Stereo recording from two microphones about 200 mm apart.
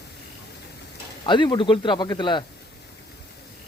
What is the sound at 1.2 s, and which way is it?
Speech, 25° left (ahead or behind).